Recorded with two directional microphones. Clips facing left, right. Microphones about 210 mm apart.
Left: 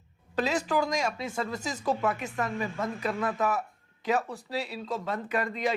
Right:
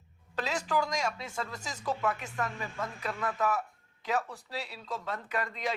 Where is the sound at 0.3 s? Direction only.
10° left (ahead or behind).